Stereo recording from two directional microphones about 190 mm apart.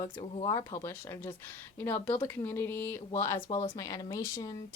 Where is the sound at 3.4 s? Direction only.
25° left (ahead or behind).